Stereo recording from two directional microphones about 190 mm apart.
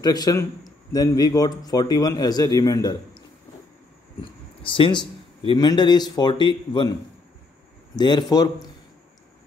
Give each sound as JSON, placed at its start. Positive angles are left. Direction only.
{"t": 0.0, "sound": "a man's voice", "side_deg": 20}
{"t": 4.6, "sound": "a man's voice", "side_deg": 25}